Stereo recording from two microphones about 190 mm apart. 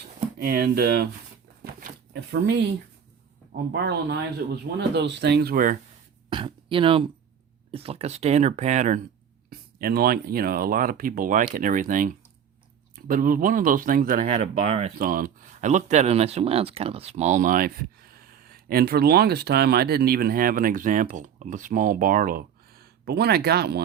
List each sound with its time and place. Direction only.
0.3 s speech: 50° right (ahead or behind)
1.6 s a sound: 55° right (ahead or behind)
3.5 s speech: 60° right (ahead or behind)
4.4 s speech: 50° right (ahead or behind)
4.9 s speech: 65° right (ahead or behind)
6.3 s a sound: 25° right (ahead or behind)
7.7 s speech: 30° right (ahead or behind)
9.5 s speech: 55° right (ahead or behind)
14.4 s speech: 30° right (ahead or behind)
14.9 s speech: 50° right (ahead or behind)